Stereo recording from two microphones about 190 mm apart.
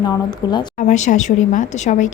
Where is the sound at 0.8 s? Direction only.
40° left (ahead or behind).